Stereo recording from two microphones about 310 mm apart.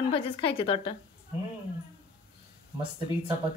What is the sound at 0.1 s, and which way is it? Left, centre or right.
Speech, centre.